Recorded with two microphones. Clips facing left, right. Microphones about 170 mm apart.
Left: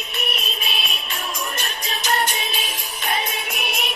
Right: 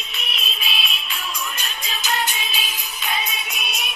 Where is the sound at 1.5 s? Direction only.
55° left (ahead or behind).